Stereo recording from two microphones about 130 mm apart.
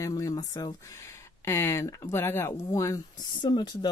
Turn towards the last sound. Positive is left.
turn(degrees=35)  # may be behind; listen again after turning